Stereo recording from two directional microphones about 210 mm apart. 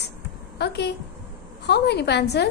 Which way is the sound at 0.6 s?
55° left (ahead or behind).